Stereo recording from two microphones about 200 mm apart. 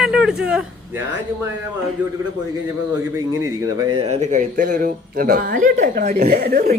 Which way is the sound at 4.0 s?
35° right (ahead or behind).